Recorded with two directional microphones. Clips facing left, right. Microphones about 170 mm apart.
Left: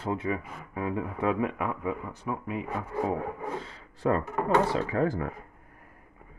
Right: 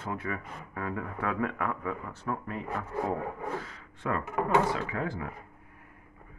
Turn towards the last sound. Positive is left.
turn(degrees=40)  # may be behind; listen again after turning